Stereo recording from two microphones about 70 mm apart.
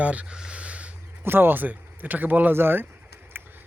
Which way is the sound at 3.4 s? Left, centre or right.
Right.